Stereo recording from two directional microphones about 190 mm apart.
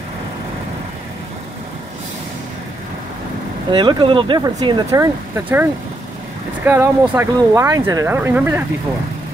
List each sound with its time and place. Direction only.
3.7 s speech: 25° right (ahead or behind); by 8.6 s 10° right (ahead or behind)